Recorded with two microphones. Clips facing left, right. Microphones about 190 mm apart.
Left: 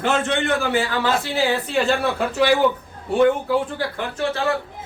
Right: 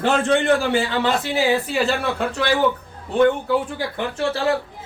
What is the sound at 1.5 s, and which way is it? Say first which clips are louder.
Speech: even; 5° right (ahead or behind).